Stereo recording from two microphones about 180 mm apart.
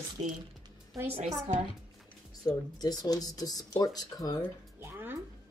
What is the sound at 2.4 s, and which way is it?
Speech, 20° left (ahead or behind).